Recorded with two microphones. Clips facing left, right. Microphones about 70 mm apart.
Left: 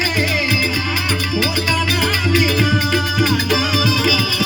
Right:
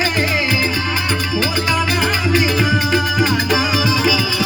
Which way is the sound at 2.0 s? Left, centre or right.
Right.